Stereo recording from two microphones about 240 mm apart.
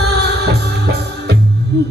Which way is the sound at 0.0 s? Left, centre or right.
Right.